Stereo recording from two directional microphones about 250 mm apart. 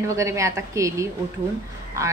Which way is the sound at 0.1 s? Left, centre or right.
Centre.